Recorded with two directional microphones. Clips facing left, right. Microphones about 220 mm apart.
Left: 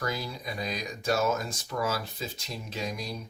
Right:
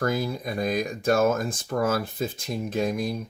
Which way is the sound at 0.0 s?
50° right (ahead or behind).